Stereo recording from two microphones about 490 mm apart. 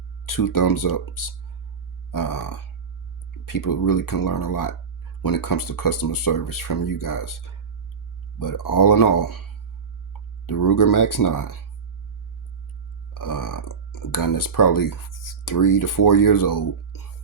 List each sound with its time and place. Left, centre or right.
0.3 s speech: left
13.1 s speech: left